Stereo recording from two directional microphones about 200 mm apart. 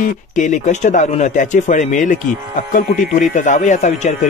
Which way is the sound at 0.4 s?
40° left (ahead or behind).